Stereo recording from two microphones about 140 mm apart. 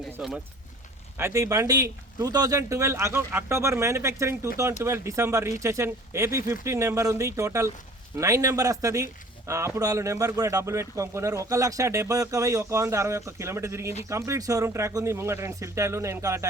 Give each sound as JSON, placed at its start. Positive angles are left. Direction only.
{"t": 0.2, "sound": "speech", "side_deg": -5}
{"t": 1.2, "sound": "speech", "side_deg": -20}